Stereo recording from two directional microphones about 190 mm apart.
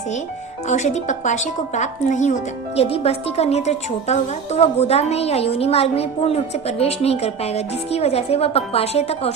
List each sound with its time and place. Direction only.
0.7 s a woman's voice: 40° left (ahead or behind)